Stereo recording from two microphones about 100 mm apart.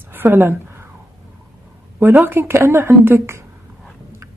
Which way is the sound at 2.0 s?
20° right (ahead or behind).